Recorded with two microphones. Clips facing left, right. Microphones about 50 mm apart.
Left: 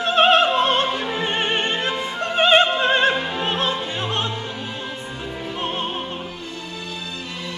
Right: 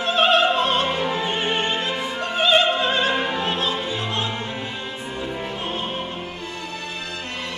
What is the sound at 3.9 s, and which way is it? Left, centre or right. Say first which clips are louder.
Opera: left 1 dB; left.